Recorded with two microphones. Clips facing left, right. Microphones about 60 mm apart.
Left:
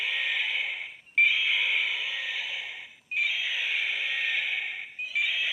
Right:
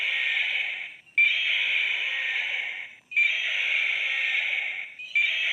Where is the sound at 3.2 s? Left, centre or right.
Centre.